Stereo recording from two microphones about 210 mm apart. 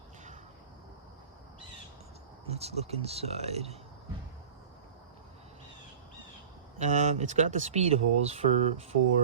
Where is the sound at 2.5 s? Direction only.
30° right (ahead or behind).